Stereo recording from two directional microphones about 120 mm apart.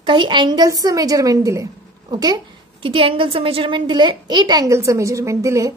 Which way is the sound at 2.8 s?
45° right (ahead or behind).